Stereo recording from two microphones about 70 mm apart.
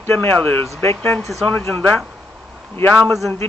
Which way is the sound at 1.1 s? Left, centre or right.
Centre.